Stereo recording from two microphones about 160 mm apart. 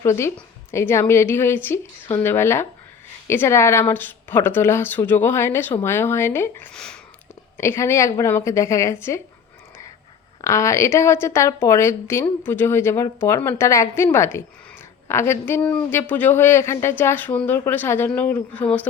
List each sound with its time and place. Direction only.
0.0 s speech: 15° left (ahead or behind)
7.5 s speech: 15° left (ahead or behind)
10.4 s speech: 20° left (ahead or behind)